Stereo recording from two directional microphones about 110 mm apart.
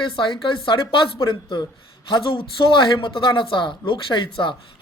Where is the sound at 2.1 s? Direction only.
50° left (ahead or behind).